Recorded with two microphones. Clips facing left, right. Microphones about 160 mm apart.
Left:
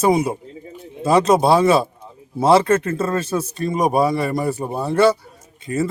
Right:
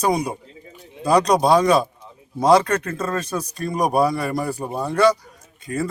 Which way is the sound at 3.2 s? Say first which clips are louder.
Left 4 dB; 25° left (ahead or behind).